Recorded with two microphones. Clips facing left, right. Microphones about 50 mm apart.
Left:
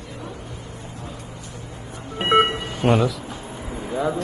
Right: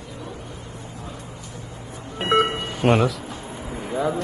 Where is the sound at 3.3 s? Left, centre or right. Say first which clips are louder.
Even; right.